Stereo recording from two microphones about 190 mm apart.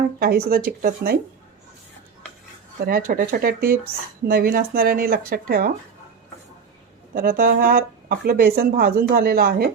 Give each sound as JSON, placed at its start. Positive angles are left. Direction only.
{"t": 0.2, "sound": "speech", "side_deg": -50}
{"t": 2.8, "sound": "speech", "side_deg": -50}
{"t": 7.1, "sound": "speech", "side_deg": -50}